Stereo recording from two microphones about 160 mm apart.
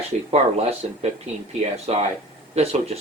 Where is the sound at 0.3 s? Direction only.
40° right (ahead or behind).